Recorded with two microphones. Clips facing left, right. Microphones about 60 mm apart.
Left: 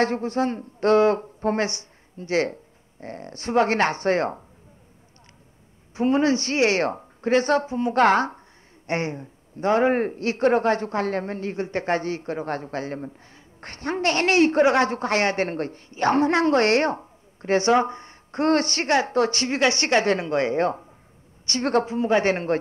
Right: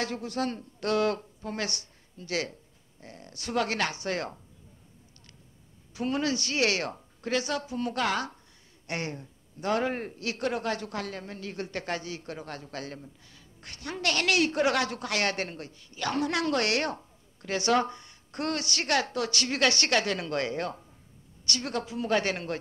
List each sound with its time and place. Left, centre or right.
0.0 s a woman's voice: left
5.9 s a woman's voice: left
15.5 s a man's voice: left
15.9 s a woman's voice: left